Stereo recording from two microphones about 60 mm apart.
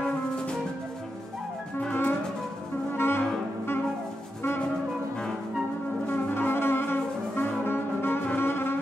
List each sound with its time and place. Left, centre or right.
1.8 s music: left
2.9 s music: left
6.0 s music: left